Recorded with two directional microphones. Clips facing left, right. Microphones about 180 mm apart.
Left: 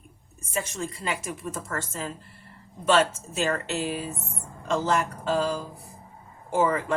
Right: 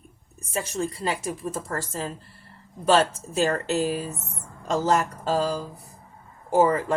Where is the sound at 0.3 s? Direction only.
35° right (ahead or behind).